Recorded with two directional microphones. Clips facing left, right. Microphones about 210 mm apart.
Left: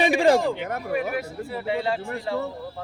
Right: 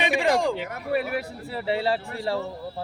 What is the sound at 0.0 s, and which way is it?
Speech, 35° left (ahead or behind).